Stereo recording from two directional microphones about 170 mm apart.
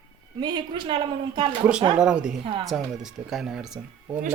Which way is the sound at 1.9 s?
5° right (ahead or behind).